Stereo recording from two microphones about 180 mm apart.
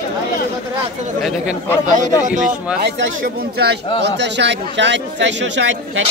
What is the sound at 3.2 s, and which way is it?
Speech, 60° right (ahead or behind).